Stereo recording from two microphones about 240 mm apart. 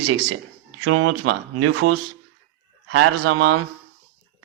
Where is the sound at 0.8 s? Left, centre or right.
Right.